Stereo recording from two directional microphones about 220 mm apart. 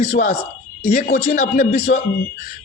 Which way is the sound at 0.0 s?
35° left (ahead or behind).